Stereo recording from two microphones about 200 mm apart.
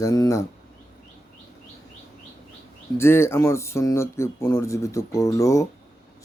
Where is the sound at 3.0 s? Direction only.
10° left (ahead or behind).